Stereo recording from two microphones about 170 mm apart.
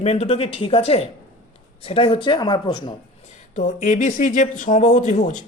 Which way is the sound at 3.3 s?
45° left (ahead or behind).